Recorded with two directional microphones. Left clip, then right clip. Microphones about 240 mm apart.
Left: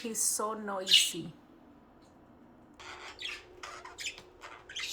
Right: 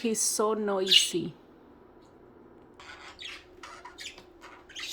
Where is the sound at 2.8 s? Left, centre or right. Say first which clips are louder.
Left 2 dB; centre.